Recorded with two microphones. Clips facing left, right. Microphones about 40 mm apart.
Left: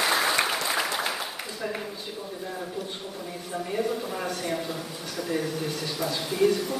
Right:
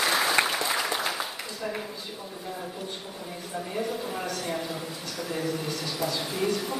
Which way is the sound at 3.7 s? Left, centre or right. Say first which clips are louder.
Left 3 dB; centre.